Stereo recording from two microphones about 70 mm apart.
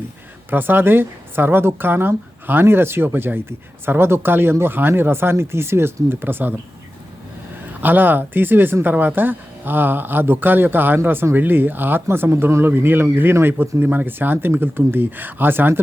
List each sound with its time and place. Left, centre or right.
0.5 s a woman's voice: right
7.8 s speech: right